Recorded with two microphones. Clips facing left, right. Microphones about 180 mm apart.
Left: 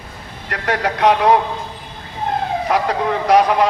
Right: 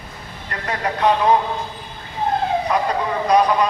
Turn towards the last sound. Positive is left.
turn(degrees=90)